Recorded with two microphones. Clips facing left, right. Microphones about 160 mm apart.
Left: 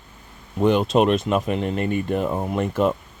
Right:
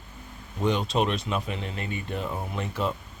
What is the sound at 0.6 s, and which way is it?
Speech, 60° left (ahead or behind).